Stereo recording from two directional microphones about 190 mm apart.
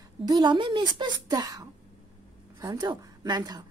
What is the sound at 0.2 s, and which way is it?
A woman's voice, 20° right (ahead or behind).